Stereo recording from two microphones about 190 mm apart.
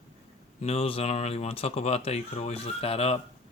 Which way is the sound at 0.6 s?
30° left (ahead or behind).